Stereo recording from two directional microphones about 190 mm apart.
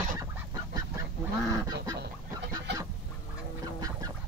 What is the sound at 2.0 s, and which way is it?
Fowl, 65° right (ahead or behind).